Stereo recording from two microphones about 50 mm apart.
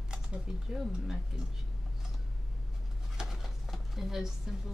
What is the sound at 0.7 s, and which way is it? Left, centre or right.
Speech, centre.